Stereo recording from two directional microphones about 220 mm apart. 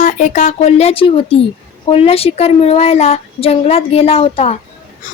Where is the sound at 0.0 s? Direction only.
35° left (ahead or behind).